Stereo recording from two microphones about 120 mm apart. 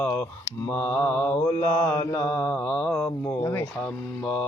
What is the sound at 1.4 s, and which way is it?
Speech, 30° left (ahead or behind).